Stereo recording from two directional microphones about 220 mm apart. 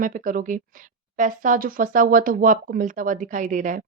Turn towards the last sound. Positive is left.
turn(degrees=-35)  # may be behind; listen again after turning